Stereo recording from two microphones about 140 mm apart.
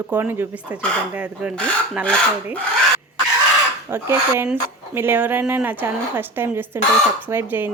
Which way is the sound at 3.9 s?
15° right (ahead or behind).